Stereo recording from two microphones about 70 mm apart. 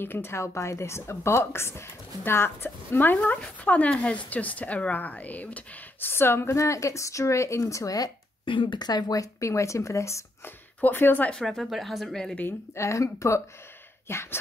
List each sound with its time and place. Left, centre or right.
0.0 s a woman's voice: left
3.2 s speech: centre; by 8.1 s left
8.7 s speech: left
10.4 s speech: left
11.3 s speech: centre
12.7 s speech: left
14.0 s a woman's voice: left